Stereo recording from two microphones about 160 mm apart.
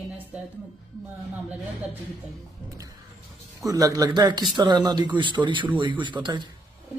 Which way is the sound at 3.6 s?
20° right (ahead or behind).